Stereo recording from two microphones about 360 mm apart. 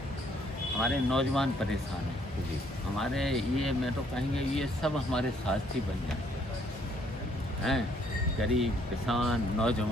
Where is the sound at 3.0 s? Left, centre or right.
Centre.